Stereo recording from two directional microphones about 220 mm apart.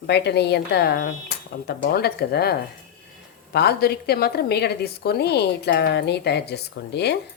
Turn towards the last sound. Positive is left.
turn(degrees=50)  # may be behind; listen again after turning